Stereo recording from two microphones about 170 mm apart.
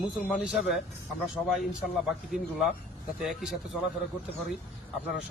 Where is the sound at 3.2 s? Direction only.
Centre (ahead or behind).